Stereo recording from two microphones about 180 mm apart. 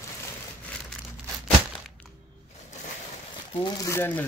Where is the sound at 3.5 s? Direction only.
25° left (ahead or behind).